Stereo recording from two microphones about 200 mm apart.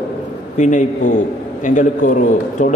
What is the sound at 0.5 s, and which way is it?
A man's voice, 40° left (ahead or behind).